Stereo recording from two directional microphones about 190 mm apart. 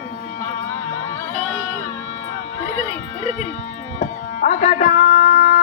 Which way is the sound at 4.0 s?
40° left (ahead or behind).